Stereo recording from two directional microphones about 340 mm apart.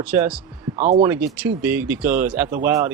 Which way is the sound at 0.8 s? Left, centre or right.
Centre.